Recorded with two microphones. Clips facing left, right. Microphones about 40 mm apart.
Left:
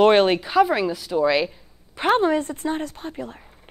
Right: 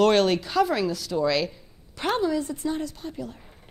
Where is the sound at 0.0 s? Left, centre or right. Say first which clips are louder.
Left 4 dB; left.